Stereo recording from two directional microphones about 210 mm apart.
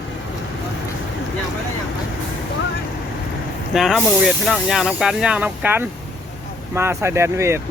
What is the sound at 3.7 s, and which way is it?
Speech, centre (ahead or behind).